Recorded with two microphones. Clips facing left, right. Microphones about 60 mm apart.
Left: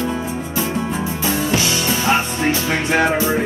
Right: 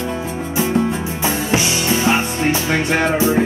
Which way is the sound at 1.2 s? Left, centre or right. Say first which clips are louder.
Right 1 dB; right.